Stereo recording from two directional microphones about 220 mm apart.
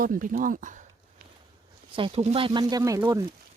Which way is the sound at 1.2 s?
45° right (ahead or behind).